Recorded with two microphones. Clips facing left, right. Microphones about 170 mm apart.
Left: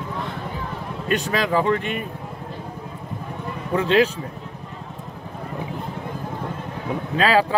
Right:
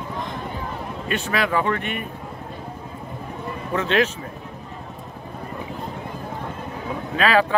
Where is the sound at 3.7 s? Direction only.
35° left (ahead or behind).